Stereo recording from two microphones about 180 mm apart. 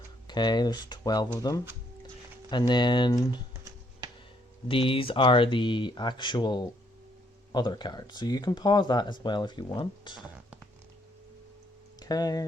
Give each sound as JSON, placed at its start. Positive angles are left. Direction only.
{"t": 0.3, "sound": "speech", "side_deg": 25}
{"t": 4.7, "sound": "speech", "side_deg": 30}
{"t": 11.9, "sound": "speech", "side_deg": 20}